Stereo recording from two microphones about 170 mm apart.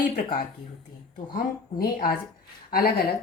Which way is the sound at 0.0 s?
55° left (ahead or behind).